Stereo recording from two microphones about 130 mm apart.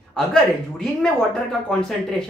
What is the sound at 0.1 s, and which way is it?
Speech, 5° left (ahead or behind).